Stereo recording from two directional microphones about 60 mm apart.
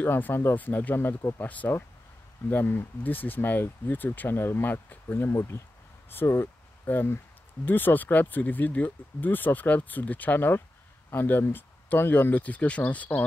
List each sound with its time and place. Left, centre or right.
0.0 s speech: left
0.6 s speech: left
2.5 s speech: left
5.3 s speech: left
6.2 s speech: left